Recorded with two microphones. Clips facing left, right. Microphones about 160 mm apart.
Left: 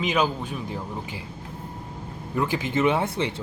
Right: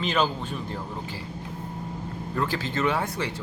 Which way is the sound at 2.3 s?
15° left (ahead or behind).